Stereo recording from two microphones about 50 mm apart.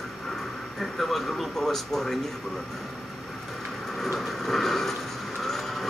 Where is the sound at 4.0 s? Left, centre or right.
Centre.